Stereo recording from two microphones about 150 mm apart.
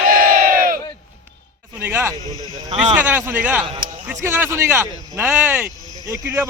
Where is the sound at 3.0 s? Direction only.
15° right (ahead or behind).